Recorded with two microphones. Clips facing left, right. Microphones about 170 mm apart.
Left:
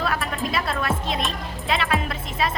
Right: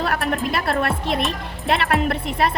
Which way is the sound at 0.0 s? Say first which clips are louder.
Right 4 dB; 65° right (ahead or behind).